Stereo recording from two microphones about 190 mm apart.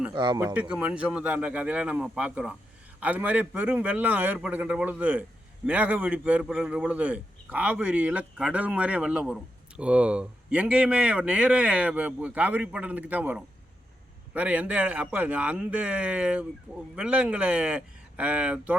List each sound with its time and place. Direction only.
0.1 s speech: 20° right (ahead or behind)
0.5 s a man's voice: 5° right (ahead or behind)